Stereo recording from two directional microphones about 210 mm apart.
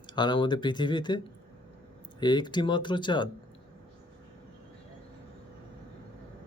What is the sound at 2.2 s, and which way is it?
Speech, 20° left (ahead or behind).